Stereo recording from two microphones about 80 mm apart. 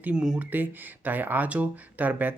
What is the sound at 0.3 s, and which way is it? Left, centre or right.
Speech, right.